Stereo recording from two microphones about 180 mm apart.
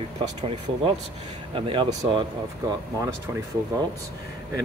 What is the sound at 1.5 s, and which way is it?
Speech, 30° right (ahead or behind).